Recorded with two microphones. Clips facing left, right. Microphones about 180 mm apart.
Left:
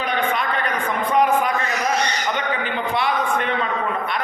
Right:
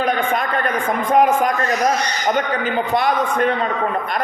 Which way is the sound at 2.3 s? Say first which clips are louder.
Right 5 dB; 45° right (ahead or behind).